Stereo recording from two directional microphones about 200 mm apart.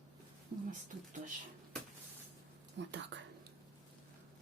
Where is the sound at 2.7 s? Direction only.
65° right (ahead or behind).